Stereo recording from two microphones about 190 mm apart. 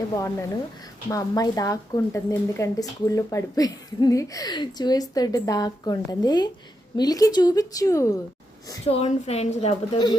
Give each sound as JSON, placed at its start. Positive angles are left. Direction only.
{"t": 0.2, "sound": "a woman's voice", "side_deg": 15}
{"t": 8.9, "sound": "a woman's voice", "side_deg": 35}